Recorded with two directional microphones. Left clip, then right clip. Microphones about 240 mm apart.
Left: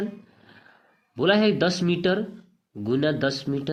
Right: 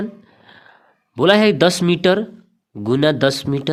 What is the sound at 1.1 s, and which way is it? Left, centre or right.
Speech, right.